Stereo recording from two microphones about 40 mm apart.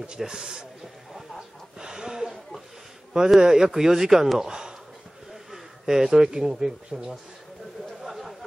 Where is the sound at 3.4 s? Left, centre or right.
Centre.